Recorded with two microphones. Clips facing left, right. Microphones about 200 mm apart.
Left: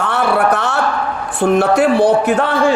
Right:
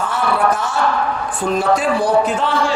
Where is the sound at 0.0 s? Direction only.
65° left (ahead or behind).